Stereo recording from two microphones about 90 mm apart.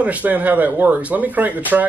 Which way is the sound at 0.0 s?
20° right (ahead or behind).